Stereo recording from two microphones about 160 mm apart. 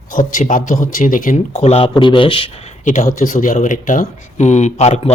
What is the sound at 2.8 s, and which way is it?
Speech, 50° left (ahead or behind).